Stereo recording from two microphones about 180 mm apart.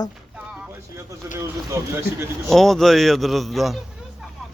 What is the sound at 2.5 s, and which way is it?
A man's voice, centre (ahead or behind).